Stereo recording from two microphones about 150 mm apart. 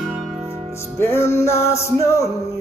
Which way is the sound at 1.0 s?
15° left (ahead or behind).